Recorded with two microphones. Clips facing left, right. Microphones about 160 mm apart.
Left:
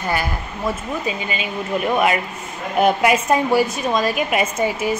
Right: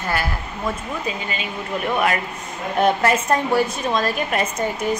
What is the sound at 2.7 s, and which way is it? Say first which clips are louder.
A woman's voice: left 2 dB; 10° left (ahead or behind).